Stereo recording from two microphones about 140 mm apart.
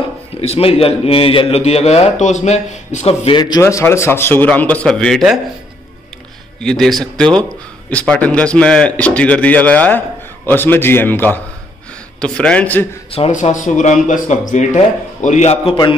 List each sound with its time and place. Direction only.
0.4 s a man's voice: 45° left (ahead or behind)
3.3 s a man's voice: 30° left (ahead or behind)
3.6 s speech: 20° left (ahead or behind); by 5.4 s centre (ahead or behind)
6.6 s a man's voice: 5° left (ahead or behind)
13.3 s a man's voice: 60° left (ahead or behind); by 15.9 s 40° left (ahead or behind)